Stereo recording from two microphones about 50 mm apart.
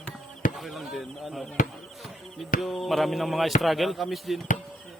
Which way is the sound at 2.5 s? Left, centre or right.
Centre.